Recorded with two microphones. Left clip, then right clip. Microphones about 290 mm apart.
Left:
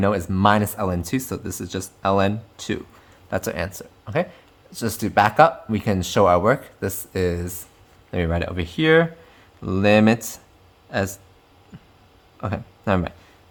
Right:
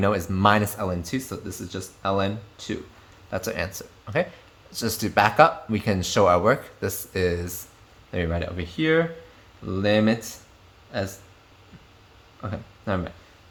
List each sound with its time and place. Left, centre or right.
0.0 s speech: centre
12.4 s speech: left